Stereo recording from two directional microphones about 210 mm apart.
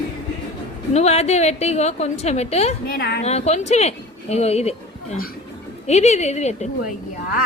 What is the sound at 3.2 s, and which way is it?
A woman's voice, 30° left (ahead or behind).